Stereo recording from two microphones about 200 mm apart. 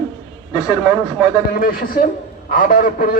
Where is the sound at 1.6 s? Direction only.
45° left (ahead or behind).